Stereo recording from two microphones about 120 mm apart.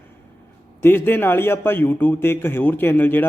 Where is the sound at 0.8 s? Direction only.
20° left (ahead or behind).